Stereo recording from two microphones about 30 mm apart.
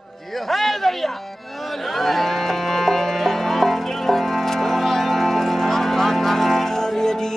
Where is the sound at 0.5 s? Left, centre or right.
Centre.